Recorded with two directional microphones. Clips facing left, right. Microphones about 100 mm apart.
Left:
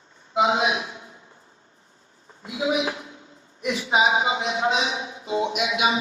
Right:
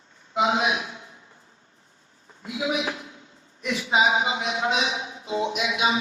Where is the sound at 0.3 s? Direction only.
30° left (ahead or behind).